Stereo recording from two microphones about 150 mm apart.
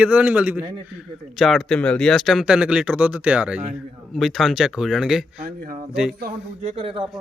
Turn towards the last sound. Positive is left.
turn(degrees=-40)  # may be behind; listen again after turning